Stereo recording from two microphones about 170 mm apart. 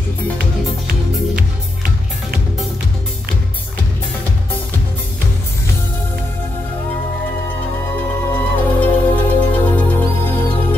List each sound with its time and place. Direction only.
0.4 s music: 60° right (ahead or behind)
8.3 s music: 10° left (ahead or behind)